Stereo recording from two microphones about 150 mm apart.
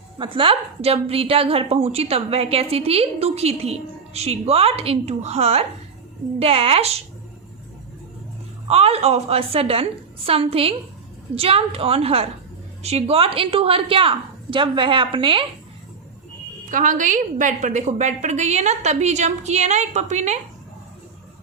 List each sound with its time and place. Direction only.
0.2 s a woman's voice: 35° right (ahead or behind)
8.6 s a woman's voice: 40° right (ahead or behind)
16.6 s a woman's voice: 60° right (ahead or behind)